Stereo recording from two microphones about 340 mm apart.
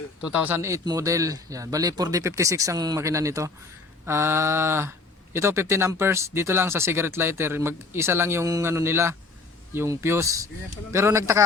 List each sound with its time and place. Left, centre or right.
0.2 s speech: centre